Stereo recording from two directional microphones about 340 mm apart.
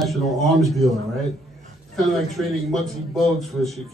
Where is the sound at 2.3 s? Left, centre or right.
Centre.